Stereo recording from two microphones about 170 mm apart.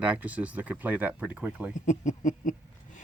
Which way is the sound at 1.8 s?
45° left (ahead or behind).